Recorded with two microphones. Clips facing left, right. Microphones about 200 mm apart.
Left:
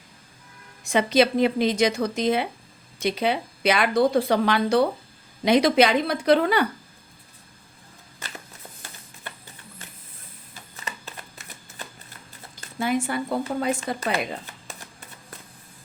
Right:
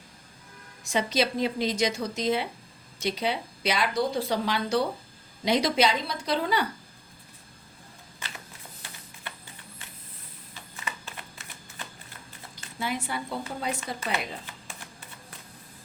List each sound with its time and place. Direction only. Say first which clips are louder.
0.9 s a woman's voice: left 7 dB; 60° left (ahead or behind)
12.5 s speech: left 8 dB; 50° left (ahead or behind)